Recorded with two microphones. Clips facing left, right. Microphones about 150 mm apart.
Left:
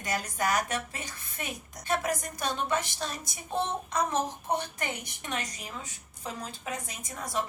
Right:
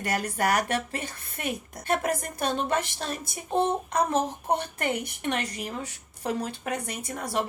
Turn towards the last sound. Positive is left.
turn(degrees=-60)  # may be behind; listen again after turning